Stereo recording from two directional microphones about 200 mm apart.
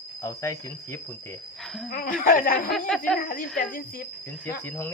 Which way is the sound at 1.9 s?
45° left (ahead or behind).